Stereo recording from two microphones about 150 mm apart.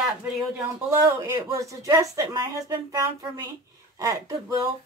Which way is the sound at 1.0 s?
20° right (ahead or behind).